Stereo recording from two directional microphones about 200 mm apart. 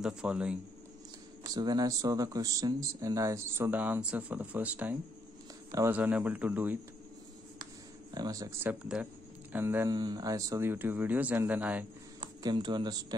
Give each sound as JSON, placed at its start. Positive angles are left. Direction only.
{"t": 0.0, "sound": "a man's voice", "side_deg": -5}
{"t": 1.4, "sound": "speech", "side_deg": -20}
{"t": 8.1, "sound": "speech", "side_deg": -20}
{"t": 12.2, "sound": "speech", "side_deg": -20}